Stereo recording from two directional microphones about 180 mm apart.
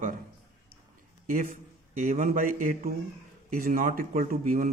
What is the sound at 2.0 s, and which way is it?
A man's voice, 45° right (ahead or behind).